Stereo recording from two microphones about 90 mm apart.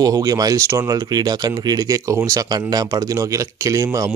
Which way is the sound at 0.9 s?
50° right (ahead or behind).